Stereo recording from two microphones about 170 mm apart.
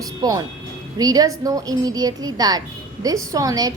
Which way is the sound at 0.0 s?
20° right (ahead or behind).